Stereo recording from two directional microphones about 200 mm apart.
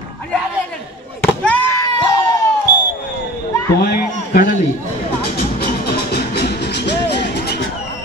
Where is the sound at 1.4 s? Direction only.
10° left (ahead or behind).